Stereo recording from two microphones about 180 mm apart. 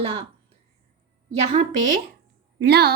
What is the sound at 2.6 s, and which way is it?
Speech, 65° right (ahead or behind).